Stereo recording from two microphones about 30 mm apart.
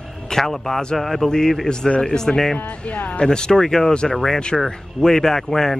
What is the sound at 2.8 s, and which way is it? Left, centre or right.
Speech, left.